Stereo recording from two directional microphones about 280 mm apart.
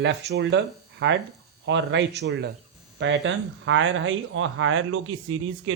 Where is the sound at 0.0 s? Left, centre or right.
Right.